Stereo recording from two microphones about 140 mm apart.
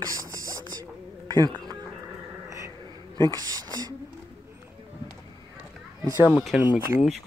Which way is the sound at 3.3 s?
30° right (ahead or behind).